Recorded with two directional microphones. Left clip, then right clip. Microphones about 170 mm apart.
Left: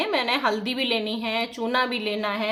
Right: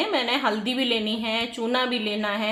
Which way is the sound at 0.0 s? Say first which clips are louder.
Even; 15° right (ahead or behind).